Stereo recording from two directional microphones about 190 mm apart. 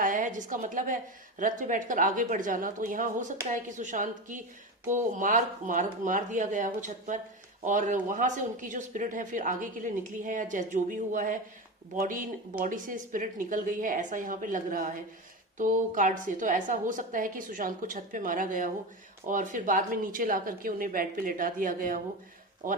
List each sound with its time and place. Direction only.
0.0 s a woman's voice: 45° right (ahead or behind)